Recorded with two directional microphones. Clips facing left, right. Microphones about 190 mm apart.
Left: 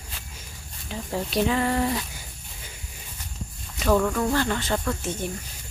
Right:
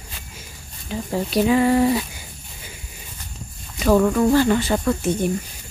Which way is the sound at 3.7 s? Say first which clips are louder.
Right 5 dB; 10° right (ahead or behind).